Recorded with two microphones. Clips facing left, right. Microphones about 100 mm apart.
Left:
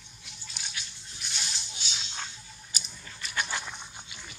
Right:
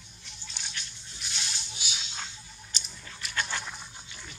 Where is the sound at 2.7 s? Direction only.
10° left (ahead or behind).